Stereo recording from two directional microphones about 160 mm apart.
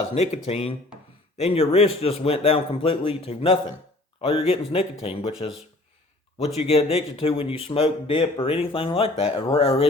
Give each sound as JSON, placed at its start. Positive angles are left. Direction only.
{"t": 0.1, "sound": "a man's voice", "side_deg": 40}